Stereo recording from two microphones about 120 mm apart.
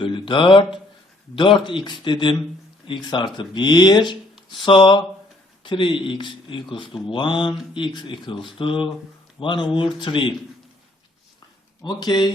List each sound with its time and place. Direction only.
0.0 s speech: 45° left (ahead or behind)
11.8 s speech: 35° left (ahead or behind)